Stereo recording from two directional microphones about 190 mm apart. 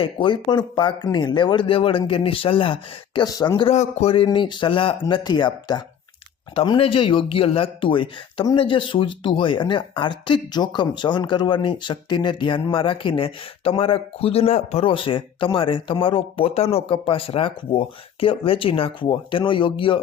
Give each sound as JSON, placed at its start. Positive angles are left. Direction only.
{"t": 0.0, "sound": "speech", "side_deg": 25}